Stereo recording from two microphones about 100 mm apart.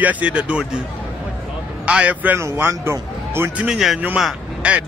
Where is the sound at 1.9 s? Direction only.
10° right (ahead or behind).